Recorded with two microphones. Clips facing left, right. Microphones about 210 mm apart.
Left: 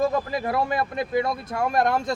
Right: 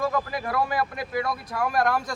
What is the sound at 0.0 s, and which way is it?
Speech, 25° left (ahead or behind).